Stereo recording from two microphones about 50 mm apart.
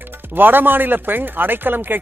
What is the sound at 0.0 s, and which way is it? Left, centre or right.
Speech, right.